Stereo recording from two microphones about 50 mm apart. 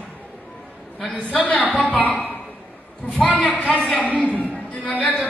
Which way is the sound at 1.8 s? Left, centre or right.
Left.